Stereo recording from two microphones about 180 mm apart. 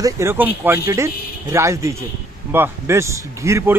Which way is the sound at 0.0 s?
15° right (ahead or behind).